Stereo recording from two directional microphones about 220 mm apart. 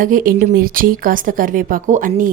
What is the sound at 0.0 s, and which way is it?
A woman's voice, 40° right (ahead or behind).